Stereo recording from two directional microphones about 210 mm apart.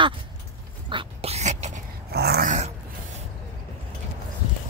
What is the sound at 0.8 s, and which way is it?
Dog, 25° right (ahead or behind).